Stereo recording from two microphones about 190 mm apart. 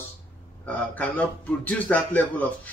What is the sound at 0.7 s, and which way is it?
A man's voice, 10° left (ahead or behind).